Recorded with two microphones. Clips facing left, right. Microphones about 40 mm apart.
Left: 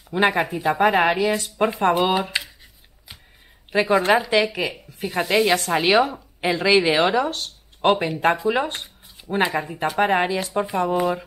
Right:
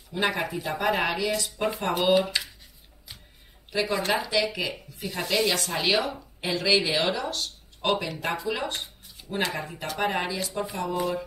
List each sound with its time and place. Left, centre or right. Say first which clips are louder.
0.1 s speech: left 7 dB; left
3.7 s speech: left 8 dB; left
4.0 s speech: left 7 dB; centre